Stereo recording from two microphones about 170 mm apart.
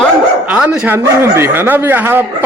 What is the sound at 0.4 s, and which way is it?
Speech, 5° right (ahead or behind).